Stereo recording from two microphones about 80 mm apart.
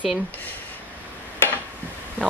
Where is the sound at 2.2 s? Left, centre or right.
Right.